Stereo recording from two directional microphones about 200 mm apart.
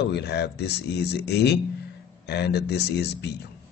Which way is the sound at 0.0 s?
55° left (ahead or behind).